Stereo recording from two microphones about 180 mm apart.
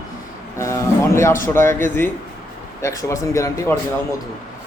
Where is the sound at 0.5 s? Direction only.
15° left (ahead or behind).